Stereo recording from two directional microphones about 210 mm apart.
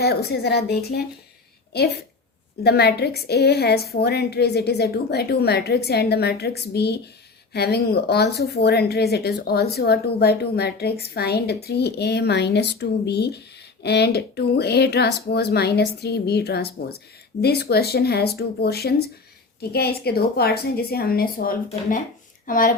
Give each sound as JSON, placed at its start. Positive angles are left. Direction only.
{"t": 0.0, "sound": "a woman's voice", "side_deg": 50}
{"t": 2.6, "sound": "a woman's voice", "side_deg": 50}